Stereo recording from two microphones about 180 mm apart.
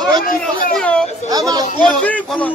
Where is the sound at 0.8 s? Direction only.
5° left (ahead or behind).